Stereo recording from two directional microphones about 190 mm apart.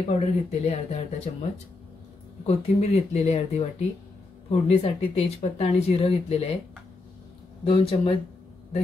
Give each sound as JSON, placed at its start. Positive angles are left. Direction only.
{"t": 0.1, "sound": "speech", "side_deg": 35}
{"t": 7.6, "sound": "speech", "side_deg": 30}